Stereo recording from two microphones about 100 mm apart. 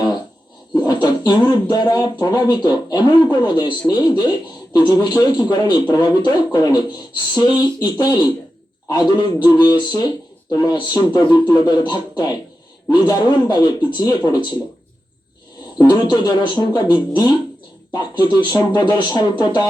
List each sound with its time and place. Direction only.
0.7 s bird: 45° left (ahead or behind)
1.7 s a man's voice: 45° left (ahead or behind)
15.8 s a man's voice: 45° left (ahead or behind)